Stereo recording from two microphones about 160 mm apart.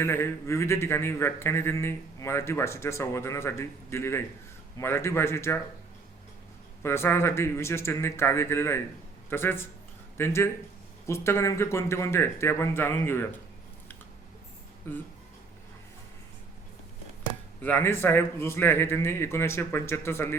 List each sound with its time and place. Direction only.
0.0 s a man's voice: 15° left (ahead or behind)
6.8 s a man's voice: 15° left (ahead or behind)
14.9 s a man's voice: 15° left (ahead or behind)
17.6 s a man's voice: 10° left (ahead or behind)